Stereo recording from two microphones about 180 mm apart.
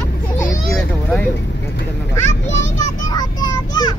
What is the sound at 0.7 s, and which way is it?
Speech, 5° left (ahead or behind).